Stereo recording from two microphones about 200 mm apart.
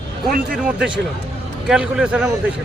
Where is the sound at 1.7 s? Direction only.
5° right (ahead or behind).